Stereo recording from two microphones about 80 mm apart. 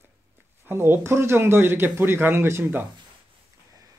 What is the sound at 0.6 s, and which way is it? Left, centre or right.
A man's voice, right.